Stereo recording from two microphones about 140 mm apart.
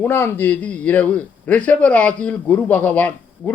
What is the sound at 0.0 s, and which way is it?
A man's voice, 15° left (ahead or behind).